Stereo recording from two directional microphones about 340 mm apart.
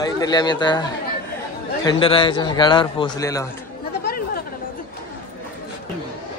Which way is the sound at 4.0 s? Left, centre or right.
Left.